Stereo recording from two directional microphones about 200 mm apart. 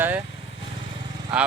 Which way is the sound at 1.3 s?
5° right (ahead or behind).